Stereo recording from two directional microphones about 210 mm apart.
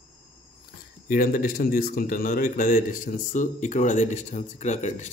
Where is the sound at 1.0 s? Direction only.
45° left (ahead or behind).